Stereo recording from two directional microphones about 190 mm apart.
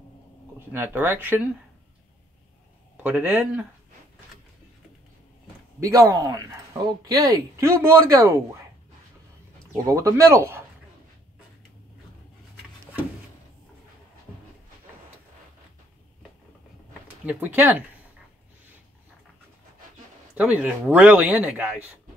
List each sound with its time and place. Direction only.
0.6 s speech: 10° right (ahead or behind)
3.0 s speech: 10° right (ahead or behind)
5.8 s speech: 15° right (ahead or behind)
9.7 s speech: 15° right (ahead or behind)
17.3 s speech: 10° right (ahead or behind)
20.3 s speech: 5° right (ahead or behind)